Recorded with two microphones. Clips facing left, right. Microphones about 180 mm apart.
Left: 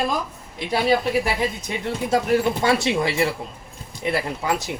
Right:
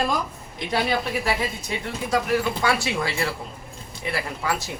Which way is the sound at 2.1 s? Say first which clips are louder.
Left 3 dB; 25° left (ahead or behind).